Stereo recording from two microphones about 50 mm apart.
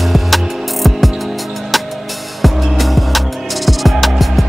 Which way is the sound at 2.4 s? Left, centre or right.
Centre.